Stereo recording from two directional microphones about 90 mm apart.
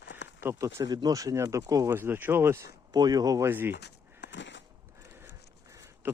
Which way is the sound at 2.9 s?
45° right (ahead or behind).